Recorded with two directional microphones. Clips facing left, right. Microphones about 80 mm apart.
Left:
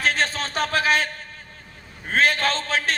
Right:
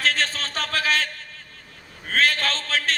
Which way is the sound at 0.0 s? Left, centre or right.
Centre.